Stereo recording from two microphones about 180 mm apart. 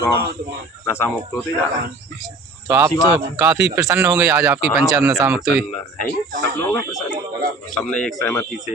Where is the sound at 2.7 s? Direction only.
15° right (ahead or behind).